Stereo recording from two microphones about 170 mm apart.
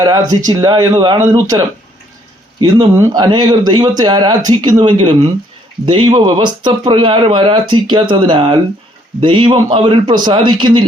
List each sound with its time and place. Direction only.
0.0 s speech: 25° right (ahead or behind)